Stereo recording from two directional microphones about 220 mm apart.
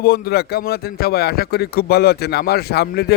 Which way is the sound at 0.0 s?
45° left (ahead or behind).